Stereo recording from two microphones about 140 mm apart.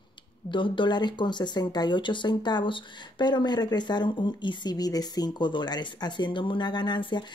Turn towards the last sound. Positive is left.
turn(degrees=35)  # may be behind; listen again after turning